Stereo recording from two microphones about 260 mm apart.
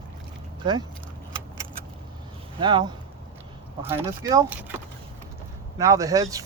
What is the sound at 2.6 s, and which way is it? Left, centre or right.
Speech, centre.